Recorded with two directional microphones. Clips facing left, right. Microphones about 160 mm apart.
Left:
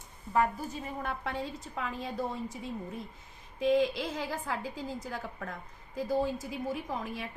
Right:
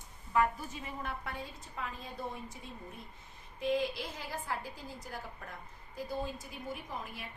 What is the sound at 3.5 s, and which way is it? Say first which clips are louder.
A woman's voice: left 6 dB; 90° left.